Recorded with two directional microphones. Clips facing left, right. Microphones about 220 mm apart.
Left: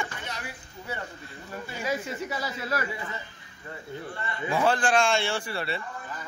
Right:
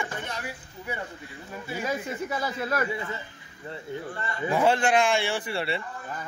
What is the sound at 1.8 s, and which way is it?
Speech, 50° right (ahead or behind).